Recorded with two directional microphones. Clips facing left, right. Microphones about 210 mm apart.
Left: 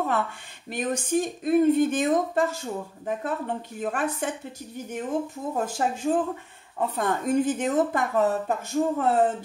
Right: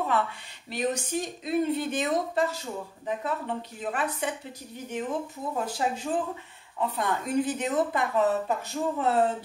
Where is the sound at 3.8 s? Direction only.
50° left (ahead or behind).